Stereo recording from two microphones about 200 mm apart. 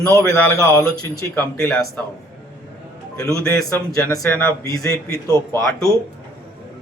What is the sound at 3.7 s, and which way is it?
A man's voice, 15° left (ahead or behind).